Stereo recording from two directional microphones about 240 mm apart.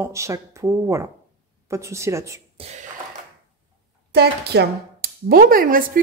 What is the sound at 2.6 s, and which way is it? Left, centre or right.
Speech, right.